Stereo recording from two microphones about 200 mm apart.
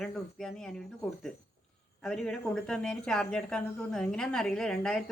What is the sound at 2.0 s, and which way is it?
Speech, 5° left (ahead or behind).